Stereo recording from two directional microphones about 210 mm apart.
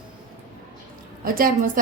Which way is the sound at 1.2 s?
45° right (ahead or behind).